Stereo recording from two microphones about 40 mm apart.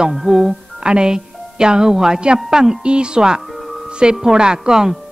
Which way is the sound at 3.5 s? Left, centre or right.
Centre.